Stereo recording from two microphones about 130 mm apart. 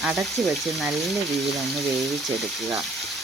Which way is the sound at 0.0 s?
Centre (ahead or behind).